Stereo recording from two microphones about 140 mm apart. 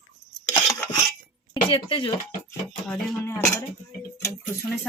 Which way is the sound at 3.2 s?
20° left (ahead or behind).